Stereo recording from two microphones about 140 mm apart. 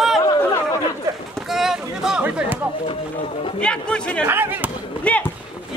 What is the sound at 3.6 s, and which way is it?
Speech, 5° left (ahead or behind).